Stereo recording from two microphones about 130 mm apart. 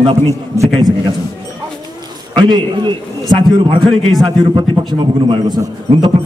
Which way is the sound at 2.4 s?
35° right (ahead or behind).